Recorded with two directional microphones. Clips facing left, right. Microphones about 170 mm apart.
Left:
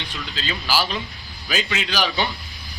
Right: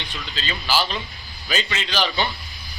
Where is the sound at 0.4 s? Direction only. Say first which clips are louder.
Even; 10° left (ahead or behind).